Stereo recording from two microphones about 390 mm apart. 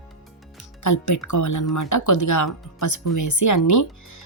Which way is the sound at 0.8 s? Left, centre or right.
Left.